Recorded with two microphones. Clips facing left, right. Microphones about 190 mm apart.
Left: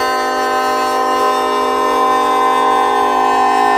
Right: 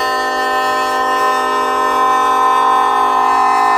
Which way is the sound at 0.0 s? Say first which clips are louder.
Left 2 dB; centre (ahead or behind).